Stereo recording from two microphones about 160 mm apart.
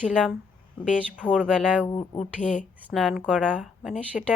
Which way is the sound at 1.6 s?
5° right (ahead or behind).